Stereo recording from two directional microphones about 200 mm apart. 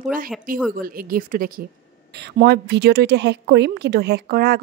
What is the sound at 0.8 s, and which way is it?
Speech, 45° right (ahead or behind).